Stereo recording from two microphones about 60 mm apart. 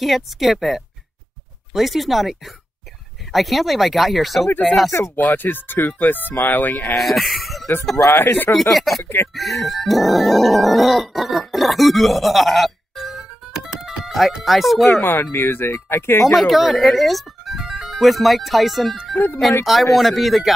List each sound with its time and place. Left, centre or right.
0.0 s speech: centre
5.3 s speech: left
7.0 s speech: centre
8.1 s speech: left
8.5 s speech: centre
9.0 s speech: left
9.3 s a sound: centre
14.9 s speech: left
16.3 s speech: centre